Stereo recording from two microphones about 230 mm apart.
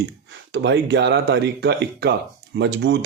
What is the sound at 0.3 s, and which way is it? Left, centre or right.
Speech, right.